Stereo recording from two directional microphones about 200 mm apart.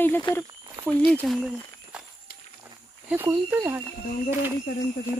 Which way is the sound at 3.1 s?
10° right (ahead or behind).